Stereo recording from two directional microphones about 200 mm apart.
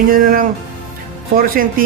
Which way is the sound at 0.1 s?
45° right (ahead or behind).